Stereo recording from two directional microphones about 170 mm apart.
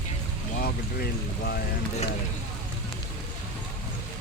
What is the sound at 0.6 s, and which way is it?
Speech, 70° left (ahead or behind).